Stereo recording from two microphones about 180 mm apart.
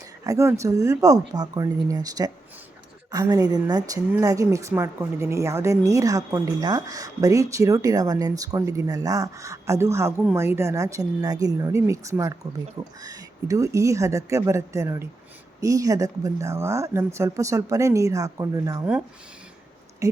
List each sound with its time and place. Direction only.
0.3 s speech: 15° right (ahead or behind)
20.0 s speech: 15° right (ahead or behind)